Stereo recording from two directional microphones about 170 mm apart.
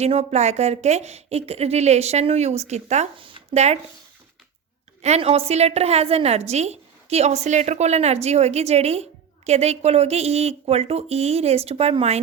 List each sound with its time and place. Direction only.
0.0 s a woman's voice: 40° right (ahead or behind)
5.0 s a woman's voice: 40° right (ahead or behind)